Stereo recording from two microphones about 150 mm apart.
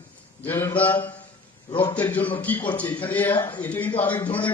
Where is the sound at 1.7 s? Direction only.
35° left (ahead or behind).